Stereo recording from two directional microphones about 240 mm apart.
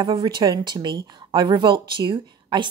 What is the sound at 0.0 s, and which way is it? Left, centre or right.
Speech, centre.